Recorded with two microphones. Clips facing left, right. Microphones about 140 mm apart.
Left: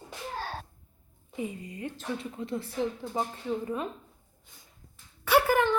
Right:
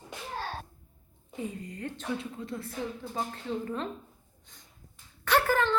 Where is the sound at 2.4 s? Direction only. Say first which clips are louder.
Left 3 dB; 25° left (ahead or behind).